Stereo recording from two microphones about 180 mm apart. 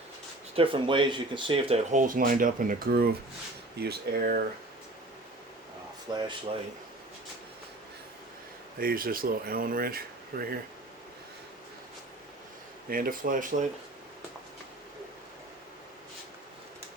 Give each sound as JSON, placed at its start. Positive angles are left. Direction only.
{"t": 0.5, "sound": "speech", "side_deg": -30}
{"t": 1.9, "sound": "speech", "side_deg": -45}
{"t": 6.1, "sound": "speech", "side_deg": -25}
{"t": 8.8, "sound": "speech", "side_deg": -55}
{"t": 12.9, "sound": "speech", "side_deg": -50}